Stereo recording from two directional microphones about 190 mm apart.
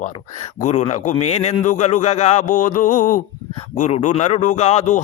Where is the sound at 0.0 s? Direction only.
40° left (ahead or behind).